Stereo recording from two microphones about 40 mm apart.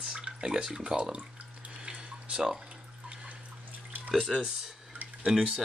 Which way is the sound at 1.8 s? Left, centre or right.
Right.